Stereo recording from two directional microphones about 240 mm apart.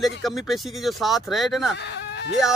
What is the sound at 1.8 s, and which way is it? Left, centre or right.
Whimper, left.